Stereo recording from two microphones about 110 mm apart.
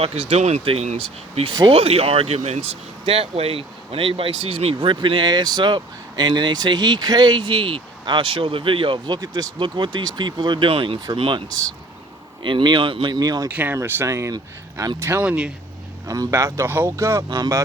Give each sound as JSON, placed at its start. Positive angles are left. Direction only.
{"t": 0.0, "sound": "speech", "side_deg": -65}
{"t": 3.1, "sound": "speech", "side_deg": -65}
{"t": 13.5, "sound": "speech", "side_deg": -15}
{"t": 14.9, "sound": "speech", "side_deg": -25}
{"t": 15.2, "sound": "speech", "side_deg": -10}
{"t": 16.0, "sound": "speech", "side_deg": -30}
{"t": 17.2, "sound": "speech", "side_deg": -40}